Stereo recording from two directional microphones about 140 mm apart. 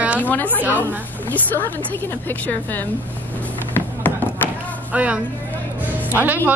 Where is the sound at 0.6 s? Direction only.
15° right (ahead or behind).